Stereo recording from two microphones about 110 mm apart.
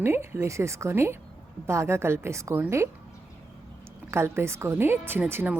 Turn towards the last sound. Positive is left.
turn(degrees=-20)  # may be behind; listen again after turning